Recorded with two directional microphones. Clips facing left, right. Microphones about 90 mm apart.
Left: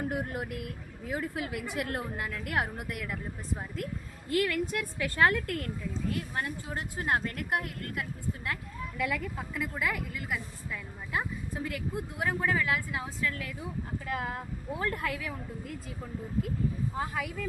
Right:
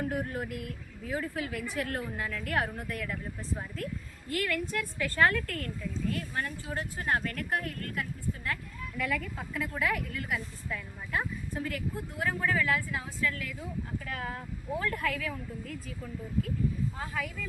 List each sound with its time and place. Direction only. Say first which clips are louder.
0.1 s a woman's voice: even; 20° left (ahead or behind)
9.0 s a woman's voice: even; 10° left (ahead or behind)
12.2 s speech: even; 20° left (ahead or behind)
17.0 s speech: left 2 dB; 20° left (ahead or behind)